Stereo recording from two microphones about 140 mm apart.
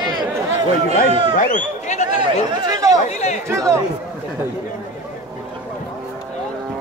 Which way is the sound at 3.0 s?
50° left (ahead or behind).